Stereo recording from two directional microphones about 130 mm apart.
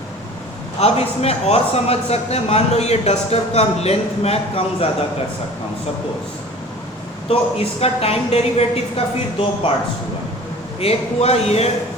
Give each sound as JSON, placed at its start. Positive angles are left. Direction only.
{"t": 0.8, "sound": "a man's voice", "side_deg": 50}
{"t": 7.8, "sound": "a man's voice", "side_deg": 50}
{"t": 10.8, "sound": "a man's voice", "side_deg": 50}